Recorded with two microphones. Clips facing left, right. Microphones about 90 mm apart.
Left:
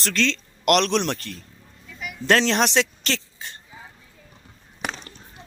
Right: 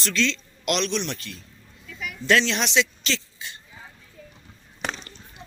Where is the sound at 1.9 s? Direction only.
5° left (ahead or behind).